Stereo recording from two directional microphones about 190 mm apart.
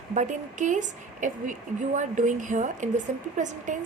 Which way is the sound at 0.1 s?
40° right (ahead or behind).